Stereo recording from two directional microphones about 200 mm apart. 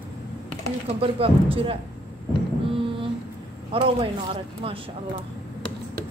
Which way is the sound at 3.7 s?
25° right (ahead or behind).